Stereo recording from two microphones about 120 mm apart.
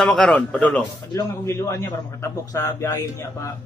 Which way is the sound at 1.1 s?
25° left (ahead or behind).